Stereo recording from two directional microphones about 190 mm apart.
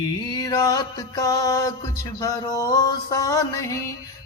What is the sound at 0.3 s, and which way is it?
Music, 20° left (ahead or behind).